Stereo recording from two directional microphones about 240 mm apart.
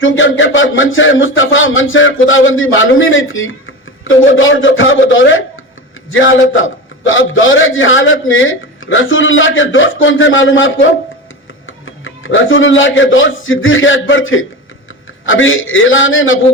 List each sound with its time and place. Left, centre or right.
0.0 s a man's voice: left
12.0 s a man's voice: left